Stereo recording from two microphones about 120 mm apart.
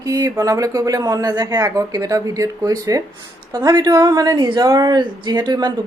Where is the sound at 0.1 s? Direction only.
30° right (ahead or behind).